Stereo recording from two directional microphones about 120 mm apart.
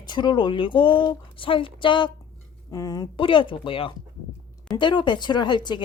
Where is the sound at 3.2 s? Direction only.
45° left (ahead or behind).